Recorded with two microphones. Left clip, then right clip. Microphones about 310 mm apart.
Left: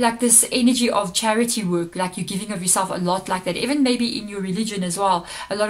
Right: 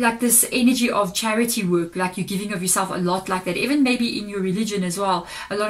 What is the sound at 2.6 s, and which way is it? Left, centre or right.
Speech, left.